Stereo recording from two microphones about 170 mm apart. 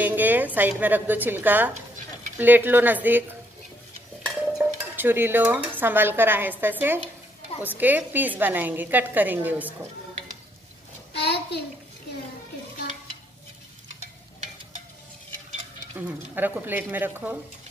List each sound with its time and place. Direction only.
0.0 s a sound: 10° right (ahead or behind)
0.6 s a woman's voice: 10° right (ahead or behind)
4.6 s dishes: 10° right (ahead or behind)
7.6 s a woman's voice: 10° right (ahead or behind)
11.1 s a sound: 70° left (ahead or behind)
13.8 s stir: 40° right (ahead or behind)
16.3 s a woman's voice: 10° right (ahead or behind)